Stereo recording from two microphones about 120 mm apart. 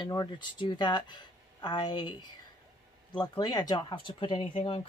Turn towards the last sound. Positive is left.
turn(degrees=45)  # may be behind; listen again after turning